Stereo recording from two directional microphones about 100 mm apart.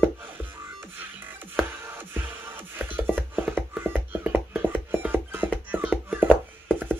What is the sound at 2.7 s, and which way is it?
Music, 20° right (ahead or behind).